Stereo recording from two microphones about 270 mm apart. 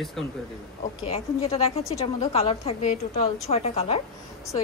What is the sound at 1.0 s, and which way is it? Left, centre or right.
A woman's voice, left.